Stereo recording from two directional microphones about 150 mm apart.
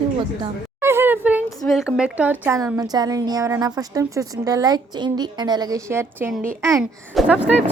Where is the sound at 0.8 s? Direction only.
15° right (ahead or behind).